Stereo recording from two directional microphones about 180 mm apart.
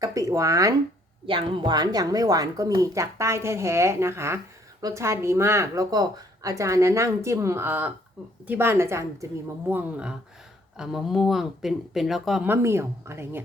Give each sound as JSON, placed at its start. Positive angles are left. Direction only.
{"t": 0.0, "sound": "speech", "side_deg": -20}
{"t": 1.3, "sound": "speech", "side_deg": -30}
{"t": 12.5, "sound": "speech", "side_deg": -15}